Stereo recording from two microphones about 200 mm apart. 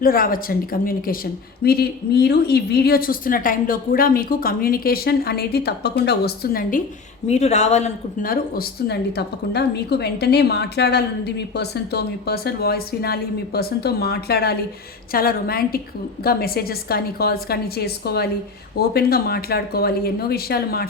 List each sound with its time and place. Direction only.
0.0 s speech: 45° left (ahead or behind)